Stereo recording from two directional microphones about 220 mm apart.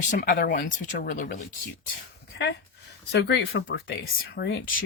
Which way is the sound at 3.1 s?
50° left (ahead or behind).